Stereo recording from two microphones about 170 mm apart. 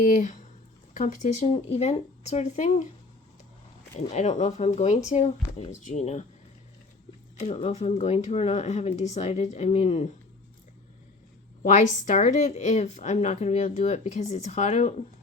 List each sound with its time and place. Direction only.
0.0 s speech: 50° left (ahead or behind)
4.1 s speech: 40° left (ahead or behind)
7.3 s speech: 40° left (ahead or behind)
11.6 s speech: 45° left (ahead or behind)